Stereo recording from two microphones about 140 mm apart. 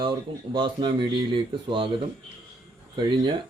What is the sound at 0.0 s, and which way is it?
Speech, 35° right (ahead or behind).